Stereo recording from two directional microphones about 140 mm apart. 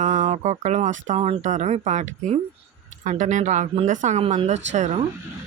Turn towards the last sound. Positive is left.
turn(degrees=-55)  # may be behind; listen again after turning